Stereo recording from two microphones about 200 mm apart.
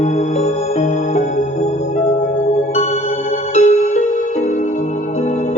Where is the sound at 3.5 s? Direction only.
35° left (ahead or behind).